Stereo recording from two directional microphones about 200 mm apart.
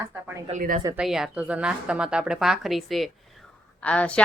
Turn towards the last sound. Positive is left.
turn(degrees=5)  # may be behind; listen again after turning